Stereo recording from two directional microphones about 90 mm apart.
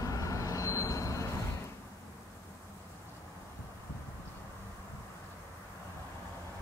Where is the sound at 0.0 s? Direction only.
40° left (ahead or behind).